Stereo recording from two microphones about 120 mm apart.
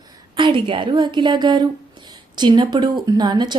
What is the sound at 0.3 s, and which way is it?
Speech, 45° right (ahead or behind).